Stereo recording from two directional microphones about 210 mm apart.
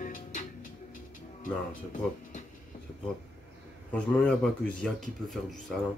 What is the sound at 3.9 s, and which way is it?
Speech, 5° left (ahead or behind).